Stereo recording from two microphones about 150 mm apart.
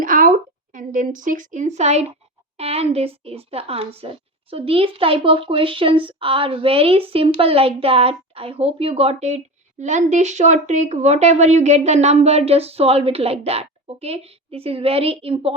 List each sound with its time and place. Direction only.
0.0 s a woman's voice: 65° right (ahead or behind); by 15.5 s 40° right (ahead or behind)